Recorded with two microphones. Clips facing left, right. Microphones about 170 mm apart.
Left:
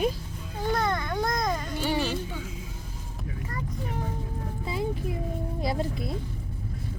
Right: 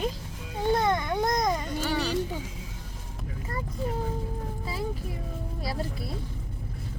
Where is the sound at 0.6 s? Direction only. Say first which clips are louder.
Right 3 dB; 20° right (ahead or behind).